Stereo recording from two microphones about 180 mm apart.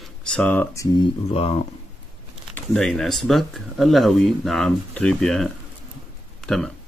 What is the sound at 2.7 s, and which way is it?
Speech, 5° left (ahead or behind).